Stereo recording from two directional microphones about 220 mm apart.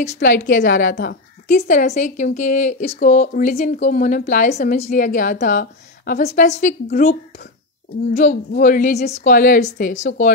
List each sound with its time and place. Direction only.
0.0 s a woman's voice: 35° left (ahead or behind)